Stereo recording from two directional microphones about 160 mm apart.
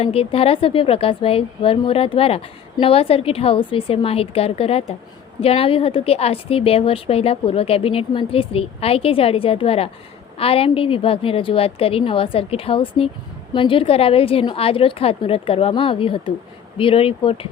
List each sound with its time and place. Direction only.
0.0 s speech: 35° left (ahead or behind)